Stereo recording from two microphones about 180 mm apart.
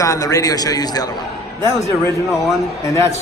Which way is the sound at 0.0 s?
20° left (ahead or behind).